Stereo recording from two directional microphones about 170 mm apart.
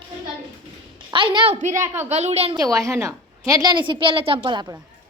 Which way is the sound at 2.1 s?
40° right (ahead or behind).